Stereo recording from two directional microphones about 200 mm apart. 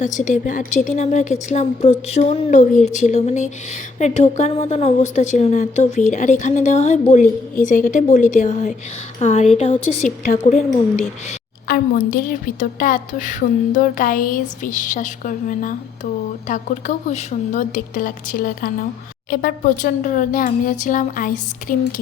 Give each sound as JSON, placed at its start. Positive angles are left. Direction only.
{"t": 0.0, "sound": "a woman's voice", "side_deg": 40}